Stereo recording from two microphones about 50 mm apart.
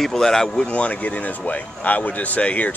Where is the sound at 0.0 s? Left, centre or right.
Centre.